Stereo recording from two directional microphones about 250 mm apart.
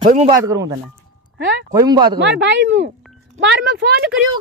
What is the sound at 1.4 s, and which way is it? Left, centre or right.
Speech, right.